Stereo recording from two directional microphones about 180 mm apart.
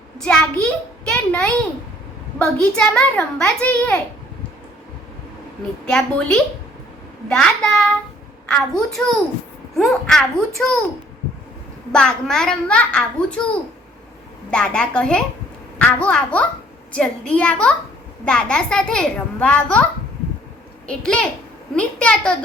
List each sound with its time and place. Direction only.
0.2 s a child's voice: 5° left (ahead or behind)
5.9 s a child's voice: 5° left (ahead or behind)
11.9 s a child's voice: 5° left (ahead or behind)
14.5 s a child's voice: 5° left (ahead or behind)